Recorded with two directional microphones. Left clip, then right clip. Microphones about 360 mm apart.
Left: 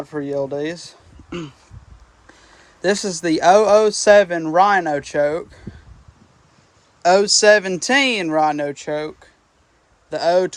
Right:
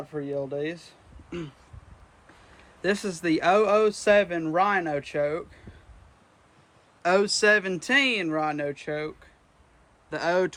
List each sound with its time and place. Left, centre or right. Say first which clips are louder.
0.1 s speech: left 7 dB; centre
2.8 s speech: left 7 dB; centre
7.0 s speech: left 9 dB; centre